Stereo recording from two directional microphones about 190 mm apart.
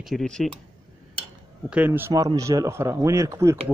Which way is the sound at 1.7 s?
10° right (ahead or behind).